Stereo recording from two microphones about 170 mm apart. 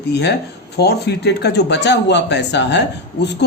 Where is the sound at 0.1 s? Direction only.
80° left.